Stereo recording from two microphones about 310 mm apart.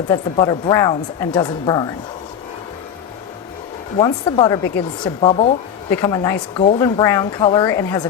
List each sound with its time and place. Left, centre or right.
0.1 s speech: centre
3.9 s speech: centre